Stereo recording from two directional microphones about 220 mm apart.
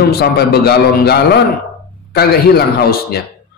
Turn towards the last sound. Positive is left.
turn(degrees=45)  # may be behind; listen again after turning